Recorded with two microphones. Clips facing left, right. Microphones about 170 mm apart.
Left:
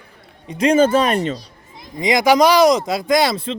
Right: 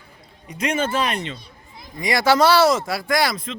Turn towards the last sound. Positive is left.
turn(degrees=30)  # may be behind; listen again after turning